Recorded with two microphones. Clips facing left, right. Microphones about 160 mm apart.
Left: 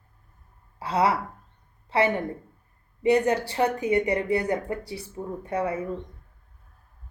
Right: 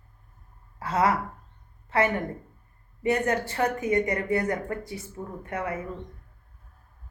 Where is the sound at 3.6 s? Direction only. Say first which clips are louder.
Left 1 dB; 30° left (ahead or behind).